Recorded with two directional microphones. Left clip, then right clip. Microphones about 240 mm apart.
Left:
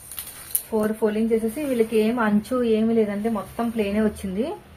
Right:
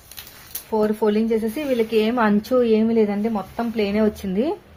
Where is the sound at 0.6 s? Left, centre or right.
Right.